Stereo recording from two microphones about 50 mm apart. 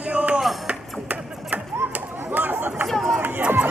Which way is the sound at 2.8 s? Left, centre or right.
Centre.